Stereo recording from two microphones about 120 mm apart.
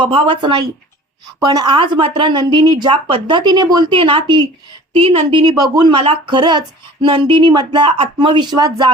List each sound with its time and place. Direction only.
0.0 s a woman's voice: 45° right (ahead or behind)
6.0 s speech: 45° right (ahead or behind)